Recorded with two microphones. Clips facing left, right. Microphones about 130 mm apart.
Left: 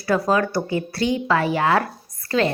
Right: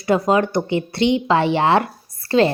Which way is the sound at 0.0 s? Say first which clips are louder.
Right 3 dB; 20° right (ahead or behind).